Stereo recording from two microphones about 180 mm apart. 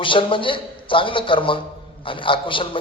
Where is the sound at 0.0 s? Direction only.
30° left (ahead or behind).